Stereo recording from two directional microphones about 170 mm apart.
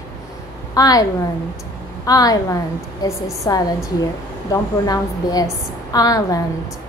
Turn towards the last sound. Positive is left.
turn(degrees=20)  # may be behind; listen again after turning